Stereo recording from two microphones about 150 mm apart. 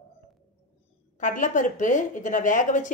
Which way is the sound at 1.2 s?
60° left (ahead or behind).